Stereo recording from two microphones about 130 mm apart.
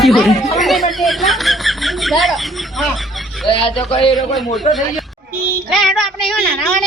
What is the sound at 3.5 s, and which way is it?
Speech, 45° left (ahead or behind).